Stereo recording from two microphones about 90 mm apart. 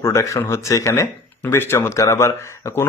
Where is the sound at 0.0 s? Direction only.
30° left (ahead or behind).